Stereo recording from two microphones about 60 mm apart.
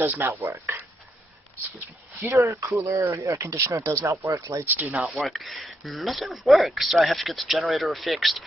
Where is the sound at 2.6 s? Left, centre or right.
Right.